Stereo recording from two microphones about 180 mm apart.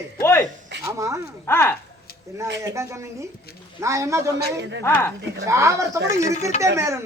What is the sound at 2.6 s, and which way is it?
Speech, 15° right (ahead or behind).